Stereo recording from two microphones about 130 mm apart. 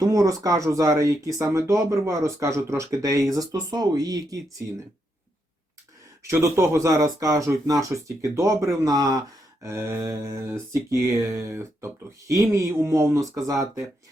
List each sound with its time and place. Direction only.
0.0 s speech: 25° right (ahead or behind)
6.2 s speech: 20° right (ahead or behind)